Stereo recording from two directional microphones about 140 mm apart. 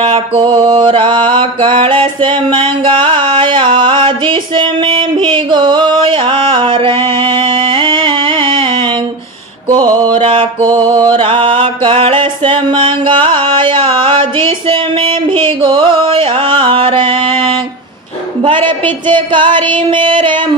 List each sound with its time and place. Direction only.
0.4 s mantra: 35° right (ahead or behind)
9.7 s mantra: 30° right (ahead or behind)
11.1 s music: 40° right (ahead or behind)
18.4 s a sound: 35° right (ahead or behind)